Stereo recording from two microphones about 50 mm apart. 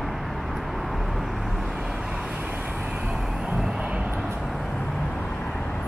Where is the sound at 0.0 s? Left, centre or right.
Centre.